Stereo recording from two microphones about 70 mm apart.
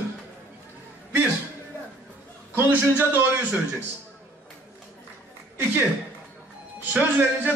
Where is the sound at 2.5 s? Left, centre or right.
Right.